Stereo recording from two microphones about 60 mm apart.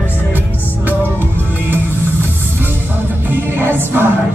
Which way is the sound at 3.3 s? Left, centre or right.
Right.